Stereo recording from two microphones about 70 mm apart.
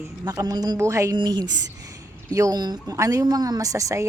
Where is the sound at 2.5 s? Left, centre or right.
Right.